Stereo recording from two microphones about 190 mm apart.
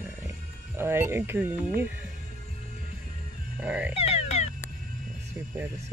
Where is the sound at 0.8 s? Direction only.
10° right (ahead or behind).